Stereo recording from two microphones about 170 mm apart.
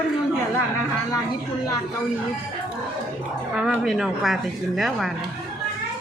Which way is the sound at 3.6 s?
5° right (ahead or behind).